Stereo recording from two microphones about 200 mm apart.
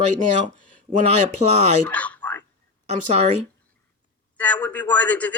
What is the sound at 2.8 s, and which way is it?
Speech, 35° right (ahead or behind).